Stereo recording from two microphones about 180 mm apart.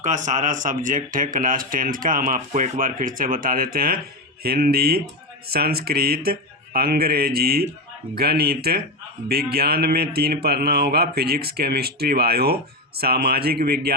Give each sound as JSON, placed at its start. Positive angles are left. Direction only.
{"t": 0.0, "sound": "speech", "side_deg": -45}